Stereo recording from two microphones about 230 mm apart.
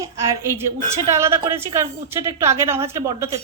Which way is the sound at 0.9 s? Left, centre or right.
Centre.